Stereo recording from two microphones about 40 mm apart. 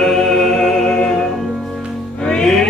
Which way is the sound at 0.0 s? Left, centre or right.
Centre.